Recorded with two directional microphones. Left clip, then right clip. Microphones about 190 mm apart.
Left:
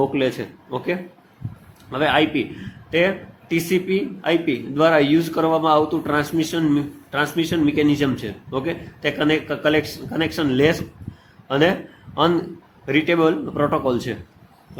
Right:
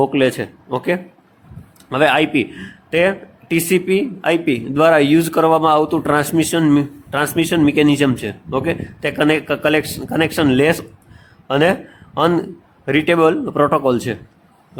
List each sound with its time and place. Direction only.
0.0 s a man's voice: 45° right (ahead or behind)